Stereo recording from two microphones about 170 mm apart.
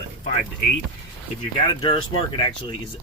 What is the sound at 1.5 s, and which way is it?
Speech, 30° left (ahead or behind).